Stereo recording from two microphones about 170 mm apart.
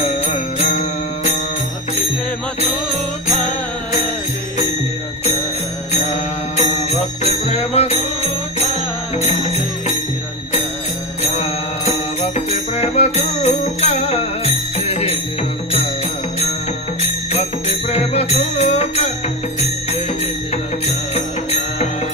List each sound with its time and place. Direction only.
0.0 s music: 40° left (ahead or behind)
3.3 s music: 45° left (ahead or behind)
5.9 s music: 40° left (ahead or behind)
11.2 s music: 40° left (ahead or behind)
17.0 s music: 40° left (ahead or behind)
20.8 s music: 40° left (ahead or behind)